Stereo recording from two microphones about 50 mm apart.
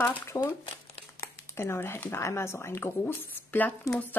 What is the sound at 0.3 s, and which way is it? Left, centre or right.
Speech, left.